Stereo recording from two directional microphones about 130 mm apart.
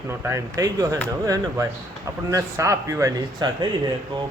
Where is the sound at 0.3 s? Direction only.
25° right (ahead or behind).